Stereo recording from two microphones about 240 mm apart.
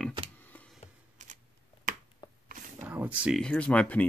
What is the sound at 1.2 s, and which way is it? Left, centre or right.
Shuffling cards, right.